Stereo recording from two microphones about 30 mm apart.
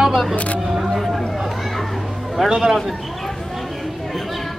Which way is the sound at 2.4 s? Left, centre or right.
Right.